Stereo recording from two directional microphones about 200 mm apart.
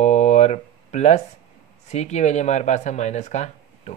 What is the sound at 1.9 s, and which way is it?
Speech, 35° left (ahead or behind).